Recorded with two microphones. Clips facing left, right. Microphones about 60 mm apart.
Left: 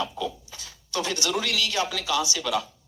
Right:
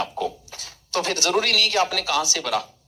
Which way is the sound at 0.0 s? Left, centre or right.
Right.